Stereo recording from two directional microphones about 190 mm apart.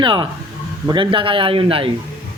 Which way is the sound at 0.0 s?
25° right (ahead or behind).